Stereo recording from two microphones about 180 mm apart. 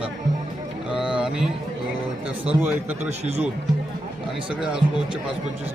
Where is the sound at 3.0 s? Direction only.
35° right (ahead or behind).